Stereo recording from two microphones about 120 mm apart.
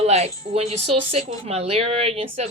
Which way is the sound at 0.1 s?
60° right (ahead or behind).